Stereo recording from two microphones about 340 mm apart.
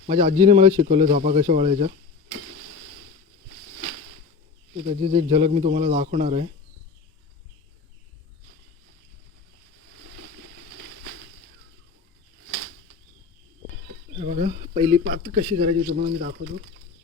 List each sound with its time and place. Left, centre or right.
0.1 s a man's voice: centre
4.9 s speech: centre
14.2 s speech: centre